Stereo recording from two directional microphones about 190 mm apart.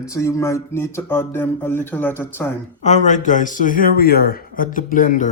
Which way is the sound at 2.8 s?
40° left (ahead or behind).